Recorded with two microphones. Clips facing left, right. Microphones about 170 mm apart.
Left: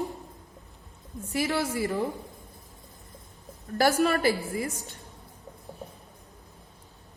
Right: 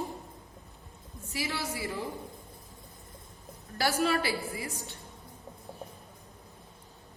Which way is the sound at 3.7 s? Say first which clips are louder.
Left 5 dB; 45° left (ahead or behind).